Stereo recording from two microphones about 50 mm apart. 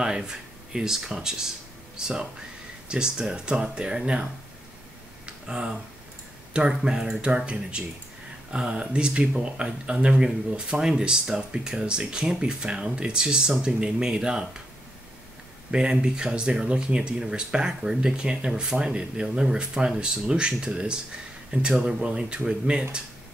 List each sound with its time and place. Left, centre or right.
0.0 s speech: centre
5.2 s a sound: centre
6.7 s speech: centre
15.7 s speech: centre